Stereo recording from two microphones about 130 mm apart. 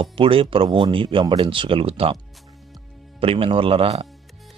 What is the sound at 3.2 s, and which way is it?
Speech, 45° right (ahead or behind).